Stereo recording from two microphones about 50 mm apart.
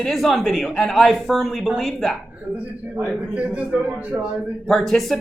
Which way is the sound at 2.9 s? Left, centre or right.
Right.